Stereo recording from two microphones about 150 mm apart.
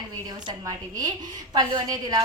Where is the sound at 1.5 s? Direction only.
25° right (ahead or behind).